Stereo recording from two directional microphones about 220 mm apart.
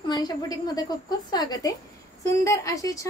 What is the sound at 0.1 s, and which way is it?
A woman's voice, 20° left (ahead or behind).